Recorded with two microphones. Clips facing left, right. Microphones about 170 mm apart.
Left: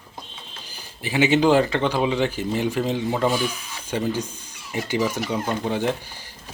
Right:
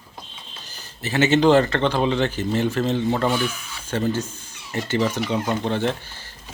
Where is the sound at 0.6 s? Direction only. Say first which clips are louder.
Right 1 dB; 10° left (ahead or behind).